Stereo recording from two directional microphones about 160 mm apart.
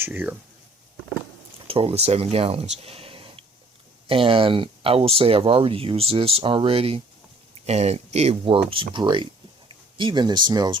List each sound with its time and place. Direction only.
0.0 s speech: 10° right (ahead or behind)
1.6 s speech: 35° right (ahead or behind)
2.8 s a sound: 35° right (ahead or behind)
4.1 s speech: 35° right (ahead or behind)